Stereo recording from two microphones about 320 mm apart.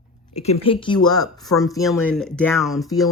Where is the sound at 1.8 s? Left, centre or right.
Centre.